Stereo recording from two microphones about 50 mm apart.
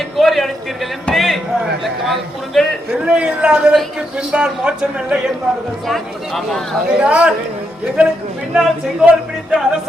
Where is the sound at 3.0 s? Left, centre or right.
Right.